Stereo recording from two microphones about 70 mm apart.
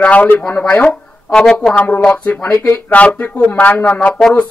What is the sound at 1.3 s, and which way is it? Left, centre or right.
Speech, centre.